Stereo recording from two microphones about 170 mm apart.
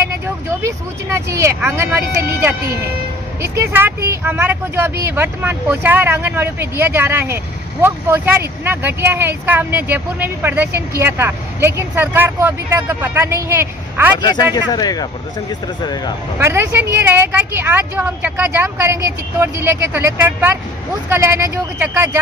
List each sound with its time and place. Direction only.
0.6 s speech: 15° right (ahead or behind)
14.1 s speech: 25° left (ahead or behind)
16.3 s speech: 15° right (ahead or behind)